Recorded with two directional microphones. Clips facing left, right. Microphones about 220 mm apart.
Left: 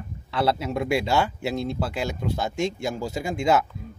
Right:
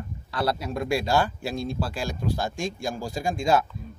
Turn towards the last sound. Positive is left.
turn(degrees=20)  # may be behind; listen again after turning